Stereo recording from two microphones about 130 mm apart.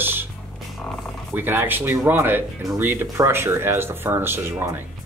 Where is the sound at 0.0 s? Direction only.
15° right (ahead or behind).